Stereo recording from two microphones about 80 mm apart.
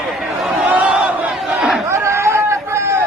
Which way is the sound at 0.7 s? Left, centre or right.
Centre.